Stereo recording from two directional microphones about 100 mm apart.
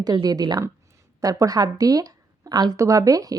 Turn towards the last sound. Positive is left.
turn(degrees=-35)  # may be behind; listen again after turning